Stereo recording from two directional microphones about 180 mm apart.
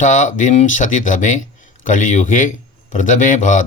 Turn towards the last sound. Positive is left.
turn(degrees=45)  # may be behind; listen again after turning